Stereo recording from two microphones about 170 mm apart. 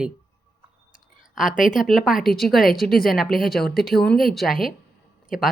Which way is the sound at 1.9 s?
Centre (ahead or behind).